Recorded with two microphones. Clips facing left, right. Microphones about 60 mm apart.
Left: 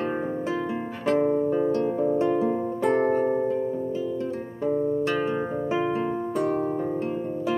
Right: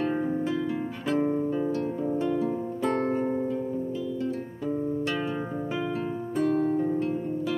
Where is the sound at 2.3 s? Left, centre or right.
Left.